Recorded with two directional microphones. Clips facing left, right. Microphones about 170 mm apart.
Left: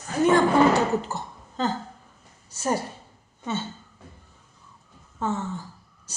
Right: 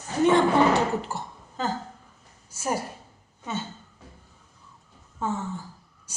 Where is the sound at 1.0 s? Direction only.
10° right (ahead or behind).